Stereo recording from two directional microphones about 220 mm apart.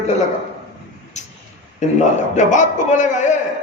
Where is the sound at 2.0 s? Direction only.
35° left (ahead or behind).